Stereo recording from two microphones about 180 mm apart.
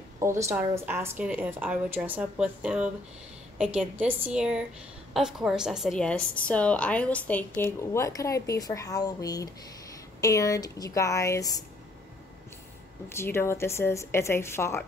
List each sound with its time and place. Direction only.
0.2 s a woman's voice: 15° right (ahead or behind); by 11.6 s 20° left (ahead or behind)
13.2 s a woman's voice: 15° left (ahead or behind)